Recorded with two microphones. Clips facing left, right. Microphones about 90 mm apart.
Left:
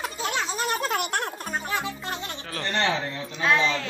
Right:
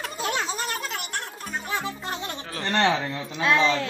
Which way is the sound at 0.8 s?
55° left (ahead or behind).